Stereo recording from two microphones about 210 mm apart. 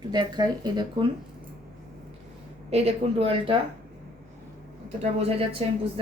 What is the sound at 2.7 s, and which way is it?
Speech, 30° right (ahead or behind).